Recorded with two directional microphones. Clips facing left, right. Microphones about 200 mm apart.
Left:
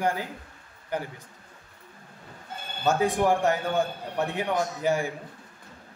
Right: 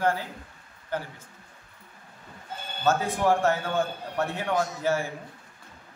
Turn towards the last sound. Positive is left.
turn(degrees=15)  # may be behind; listen again after turning